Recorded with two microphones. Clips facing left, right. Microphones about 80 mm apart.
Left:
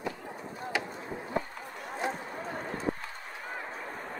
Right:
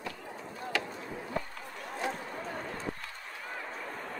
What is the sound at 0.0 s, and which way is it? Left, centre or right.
Chop, centre.